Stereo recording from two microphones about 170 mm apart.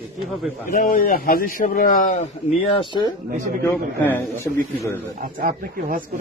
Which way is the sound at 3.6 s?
15° left (ahead or behind).